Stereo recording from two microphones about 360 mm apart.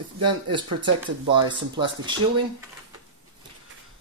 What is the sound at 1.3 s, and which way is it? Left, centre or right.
Speech, centre.